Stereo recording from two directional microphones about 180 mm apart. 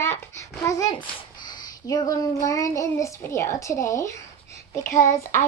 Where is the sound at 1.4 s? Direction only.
20° left (ahead or behind).